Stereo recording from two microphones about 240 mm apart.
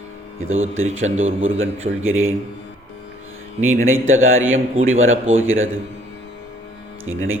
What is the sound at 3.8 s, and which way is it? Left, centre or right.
A man's voice, right.